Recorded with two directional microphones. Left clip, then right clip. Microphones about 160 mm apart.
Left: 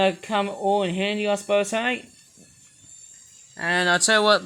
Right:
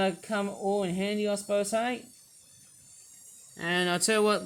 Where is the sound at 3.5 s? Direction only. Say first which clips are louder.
Left 8 dB; 5° right (ahead or behind).